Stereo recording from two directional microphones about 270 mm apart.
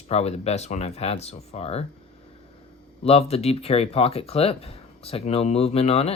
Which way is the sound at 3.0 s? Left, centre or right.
Left.